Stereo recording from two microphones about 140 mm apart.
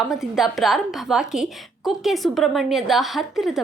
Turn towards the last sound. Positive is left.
turn(degrees=0)  # may be behind; listen again after turning